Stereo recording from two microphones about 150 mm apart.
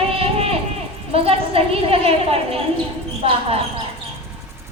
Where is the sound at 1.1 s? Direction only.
40° right (ahead or behind).